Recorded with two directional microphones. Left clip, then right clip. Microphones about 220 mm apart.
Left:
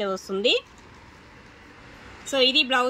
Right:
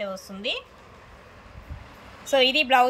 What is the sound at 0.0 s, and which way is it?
Speech, 15° left (ahead or behind).